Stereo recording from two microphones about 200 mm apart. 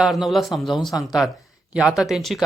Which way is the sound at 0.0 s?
Centre (ahead or behind).